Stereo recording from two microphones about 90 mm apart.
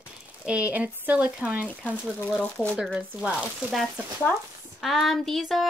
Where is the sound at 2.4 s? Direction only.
20° left (ahead or behind).